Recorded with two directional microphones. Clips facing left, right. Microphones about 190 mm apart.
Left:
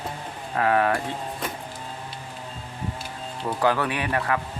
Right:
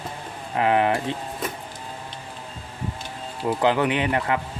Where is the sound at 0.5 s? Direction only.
20° right (ahead or behind).